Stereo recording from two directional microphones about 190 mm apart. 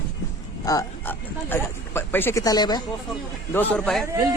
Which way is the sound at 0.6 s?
20° left (ahead or behind).